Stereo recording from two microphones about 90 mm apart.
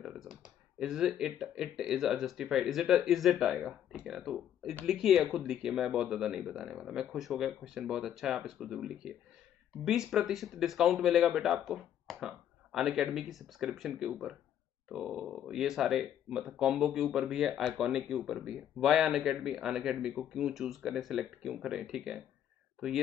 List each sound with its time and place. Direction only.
0.0 s speech: 5° right (ahead or behind)